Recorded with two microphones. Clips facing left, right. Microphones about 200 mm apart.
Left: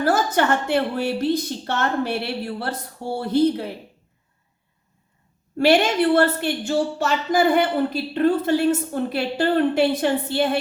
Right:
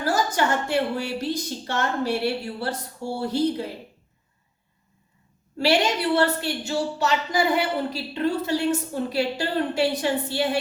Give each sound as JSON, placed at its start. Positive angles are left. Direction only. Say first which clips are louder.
{"t": 0.0, "sound": "a woman's voice", "louder": "left 4 dB", "side_deg": 55}
{"t": 5.5, "sound": "a woman's voice", "louder": "left 5 dB", "side_deg": 55}